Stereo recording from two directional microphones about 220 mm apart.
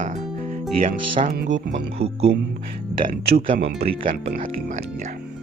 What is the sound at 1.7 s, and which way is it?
Speech, 50° right (ahead or behind).